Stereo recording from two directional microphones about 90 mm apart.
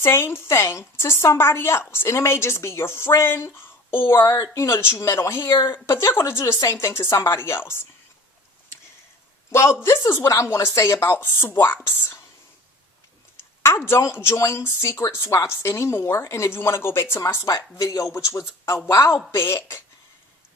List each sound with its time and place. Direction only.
0.0 s a woman's voice: 30° left (ahead or behind)
9.5 s a man's voice: 30° left (ahead or behind)
13.6 s a woman's voice: 30° left (ahead or behind)